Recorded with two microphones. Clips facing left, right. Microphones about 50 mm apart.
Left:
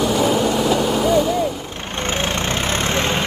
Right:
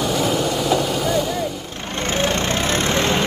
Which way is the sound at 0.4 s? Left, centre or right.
Left.